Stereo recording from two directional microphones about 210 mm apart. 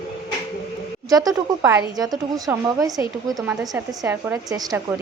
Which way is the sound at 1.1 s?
15° right (ahead or behind).